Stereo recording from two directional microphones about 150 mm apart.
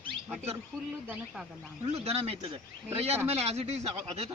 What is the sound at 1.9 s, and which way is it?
Speech, 40° right (ahead or behind).